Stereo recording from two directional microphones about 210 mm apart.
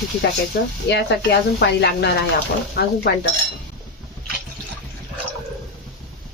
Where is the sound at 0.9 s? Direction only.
55° left (ahead or behind).